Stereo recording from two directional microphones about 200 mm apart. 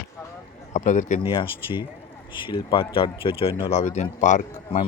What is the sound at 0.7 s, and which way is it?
Speech, 35° left (ahead or behind).